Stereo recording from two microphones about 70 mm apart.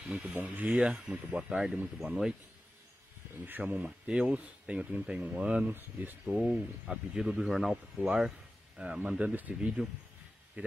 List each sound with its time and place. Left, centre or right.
0.3 s speech: right; by 2.3 s centre
3.4 s speech: right
3.8 s speech: centre
5.7 s speech: right
6.3 s speech: centre